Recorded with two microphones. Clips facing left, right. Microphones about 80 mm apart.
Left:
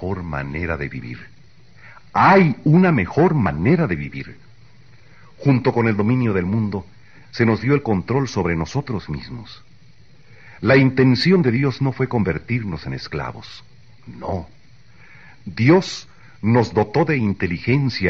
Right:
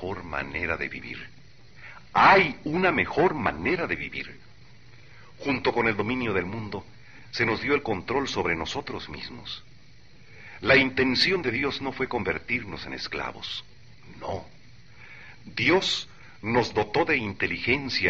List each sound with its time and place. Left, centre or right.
0.0 s speech: centre
1.8 s a sound: centre
2.7 s speech: centre
3.6 s speech: centre
5.4 s speech: left
6.2 s speech: centre
7.3 s speech: left
10.4 s a sound: centre
11.0 s speech: left